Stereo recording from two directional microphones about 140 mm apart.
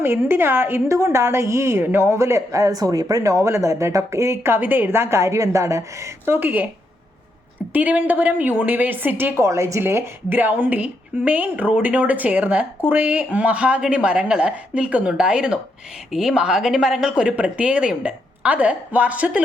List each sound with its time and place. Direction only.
0.0 s a woman's voice: 15° right (ahead or behind)
7.7 s speech: 10° right (ahead or behind)